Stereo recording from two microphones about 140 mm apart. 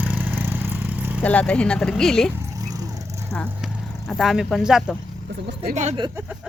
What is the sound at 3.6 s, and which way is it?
Vehicle, centre (ahead or behind).